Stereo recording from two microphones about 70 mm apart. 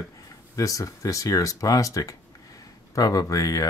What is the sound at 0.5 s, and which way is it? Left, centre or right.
Speech, left.